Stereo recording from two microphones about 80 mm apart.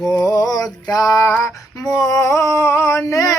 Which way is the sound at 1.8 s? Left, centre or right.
Left.